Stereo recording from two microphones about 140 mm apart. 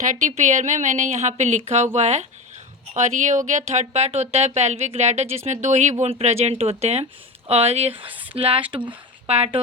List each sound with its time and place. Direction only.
0.0 s speech: 60° right (ahead or behind); by 8.0 s 45° right (ahead or behind)
8.0 s speech: 10° right (ahead or behind)
8.4 s speech: 45° right (ahead or behind)